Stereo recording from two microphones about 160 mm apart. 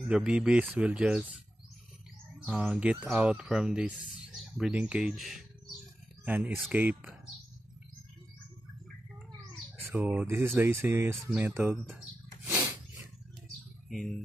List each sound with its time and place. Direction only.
0.1 s speech: 5° right (ahead or behind)
2.4 s speech: 5° right (ahead or behind)
9.9 s speech: 15° right (ahead or behind)
12.4 s snort: 15° right (ahead or behind)
13.8 s speech: centre (ahead or behind)